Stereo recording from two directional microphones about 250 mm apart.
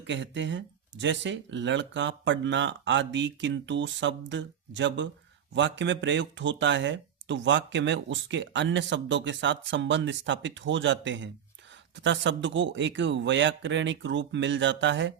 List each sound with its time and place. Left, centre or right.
0.0 s speech: right